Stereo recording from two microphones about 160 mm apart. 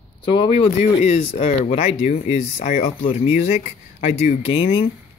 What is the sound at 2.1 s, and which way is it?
Speech, 55° left (ahead or behind).